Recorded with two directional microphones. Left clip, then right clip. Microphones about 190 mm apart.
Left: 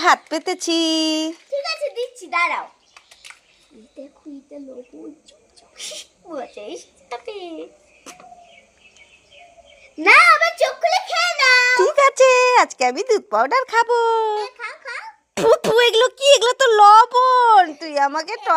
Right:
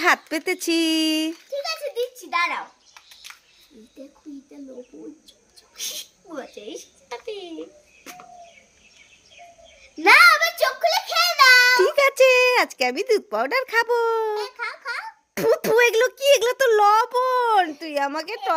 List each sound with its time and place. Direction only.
0.0 s a child's voice: 10° right (ahead or behind)
5.7 s a sound: 15° right (ahead or behind)
6.6 s speech: 15° right (ahead or behind)
9.8 s a child's voice: 15° right (ahead or behind)
10.8 s a sound: 15° right (ahead or behind)
11.8 s a child's voice: centre (ahead or behind)
14.3 s speech: 20° right (ahead or behind)
15.4 s a child's voice: 5° left (ahead or behind)